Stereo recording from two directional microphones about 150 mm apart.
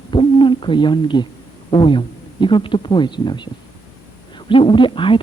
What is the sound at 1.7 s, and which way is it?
Speech, 35° left (ahead or behind).